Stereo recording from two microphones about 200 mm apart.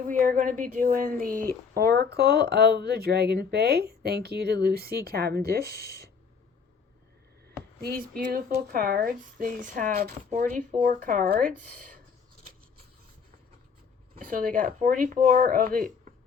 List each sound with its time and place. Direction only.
0.1 s speech: 40° right (ahead or behind)
8.2 s speech: 50° right (ahead or behind)
14.2 s speech: 45° right (ahead or behind)